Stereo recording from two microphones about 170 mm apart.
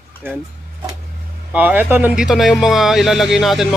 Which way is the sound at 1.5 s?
10° right (ahead or behind).